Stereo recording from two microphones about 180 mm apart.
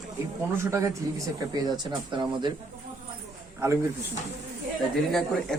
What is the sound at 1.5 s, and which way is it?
Speech, 25° right (ahead or behind).